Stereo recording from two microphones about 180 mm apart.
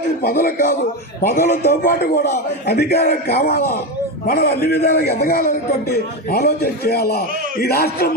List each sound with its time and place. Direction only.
0.2 s a man's voice: 55° left (ahead or behind)